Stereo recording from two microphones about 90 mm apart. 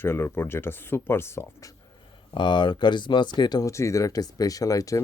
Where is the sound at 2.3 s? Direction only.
60° left (ahead or behind).